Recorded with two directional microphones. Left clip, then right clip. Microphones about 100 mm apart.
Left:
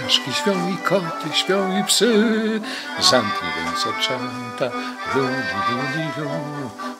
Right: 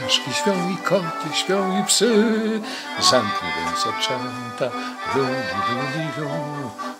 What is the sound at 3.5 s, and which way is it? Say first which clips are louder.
Accordion: even; 35° left (ahead or behind).